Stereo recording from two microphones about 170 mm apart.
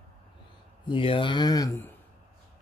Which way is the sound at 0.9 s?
30° left (ahead or behind).